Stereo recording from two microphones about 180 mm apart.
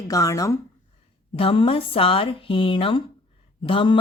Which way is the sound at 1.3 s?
30° left (ahead or behind).